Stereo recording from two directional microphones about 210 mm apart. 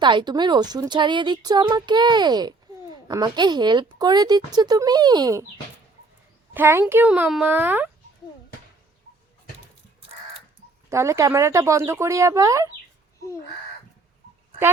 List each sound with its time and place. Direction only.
0.0 s speech: 20° right (ahead or behind)
6.5 s speech: 10° right (ahead or behind)
10.8 s speech: 15° right (ahead or behind)